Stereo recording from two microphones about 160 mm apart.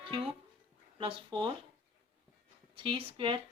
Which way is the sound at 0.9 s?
35° right (ahead or behind).